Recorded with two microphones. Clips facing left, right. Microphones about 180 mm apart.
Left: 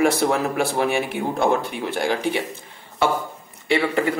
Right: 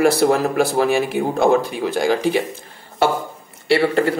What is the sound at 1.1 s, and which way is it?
Speech, 90° right.